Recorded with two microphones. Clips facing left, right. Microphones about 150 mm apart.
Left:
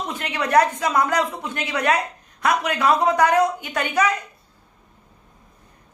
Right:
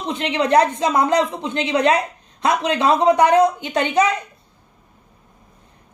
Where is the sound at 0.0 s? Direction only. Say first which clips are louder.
Right 5 dB; 25° right (ahead or behind).